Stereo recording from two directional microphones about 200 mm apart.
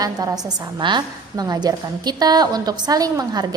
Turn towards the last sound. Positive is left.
turn(degrees=-20)  # may be behind; listen again after turning